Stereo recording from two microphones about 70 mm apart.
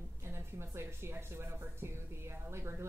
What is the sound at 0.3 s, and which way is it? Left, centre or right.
Speech, right.